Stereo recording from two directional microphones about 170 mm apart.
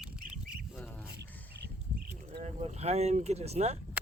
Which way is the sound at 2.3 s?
40° right (ahead or behind).